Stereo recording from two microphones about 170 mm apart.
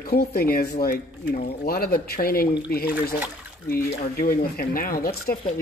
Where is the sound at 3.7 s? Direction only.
60° left (ahead or behind).